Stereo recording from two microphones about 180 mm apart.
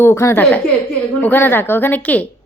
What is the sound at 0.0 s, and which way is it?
Speech, 15° left (ahead or behind).